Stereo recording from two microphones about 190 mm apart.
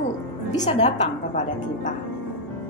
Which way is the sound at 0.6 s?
35° left (ahead or behind).